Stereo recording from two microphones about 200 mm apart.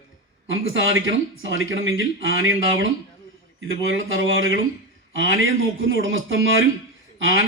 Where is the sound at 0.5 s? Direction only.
75° right (ahead or behind).